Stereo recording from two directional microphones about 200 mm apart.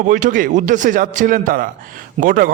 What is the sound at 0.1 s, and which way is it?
A man's voice, 40° right (ahead or behind).